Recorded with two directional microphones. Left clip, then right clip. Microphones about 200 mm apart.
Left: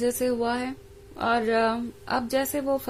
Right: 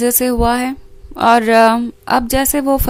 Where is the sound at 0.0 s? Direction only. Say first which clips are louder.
Right 10 dB; 40° right (ahead or behind).